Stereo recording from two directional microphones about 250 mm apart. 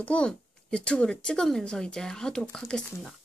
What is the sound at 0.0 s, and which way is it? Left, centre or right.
A woman's voice, centre.